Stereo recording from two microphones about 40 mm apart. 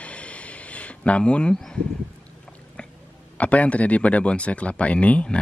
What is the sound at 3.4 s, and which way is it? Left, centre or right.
Speech, left.